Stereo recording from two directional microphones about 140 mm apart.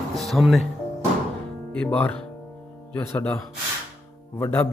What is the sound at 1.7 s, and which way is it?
Speech, 10° left (ahead or behind).